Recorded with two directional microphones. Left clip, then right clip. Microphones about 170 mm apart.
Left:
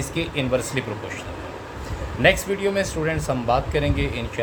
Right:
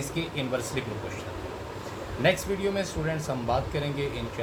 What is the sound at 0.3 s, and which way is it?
Speech, 90° left.